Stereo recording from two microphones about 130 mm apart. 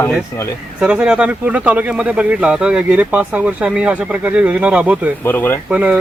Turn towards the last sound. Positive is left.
turn(degrees=-10)  # may be behind; listen again after turning